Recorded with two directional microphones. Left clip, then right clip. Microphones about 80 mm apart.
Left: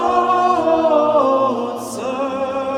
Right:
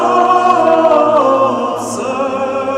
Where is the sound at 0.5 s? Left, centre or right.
Right.